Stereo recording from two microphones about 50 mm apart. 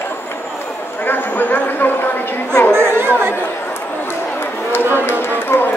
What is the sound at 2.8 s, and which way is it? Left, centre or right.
Chatter, right.